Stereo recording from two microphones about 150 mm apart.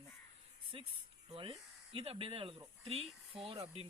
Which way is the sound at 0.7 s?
35° right (ahead or behind).